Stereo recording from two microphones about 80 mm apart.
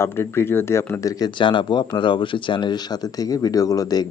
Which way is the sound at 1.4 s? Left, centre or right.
Left.